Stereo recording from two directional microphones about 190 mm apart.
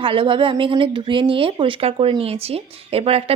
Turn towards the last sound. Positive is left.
turn(degrees=-30)  # may be behind; listen again after turning